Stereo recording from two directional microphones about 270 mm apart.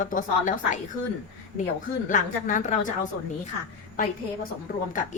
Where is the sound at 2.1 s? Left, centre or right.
Left.